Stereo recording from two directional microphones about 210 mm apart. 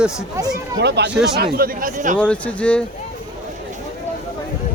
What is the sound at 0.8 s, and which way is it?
Speech, 55° right (ahead or behind).